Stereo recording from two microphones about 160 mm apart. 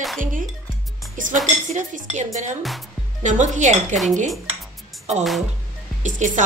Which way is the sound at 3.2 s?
50° right (ahead or behind).